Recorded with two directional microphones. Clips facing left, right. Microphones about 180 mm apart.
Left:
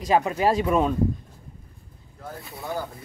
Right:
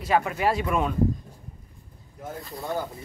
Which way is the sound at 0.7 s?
25° left (ahead or behind).